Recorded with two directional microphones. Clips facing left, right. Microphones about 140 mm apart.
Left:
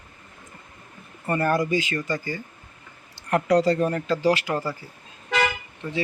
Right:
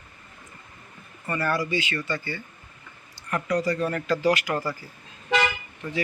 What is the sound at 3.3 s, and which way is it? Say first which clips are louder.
Speech: left 6 dB; 70° left (ahead or behind).